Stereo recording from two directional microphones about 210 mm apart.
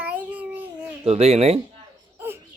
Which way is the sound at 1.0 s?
30° right (ahead or behind).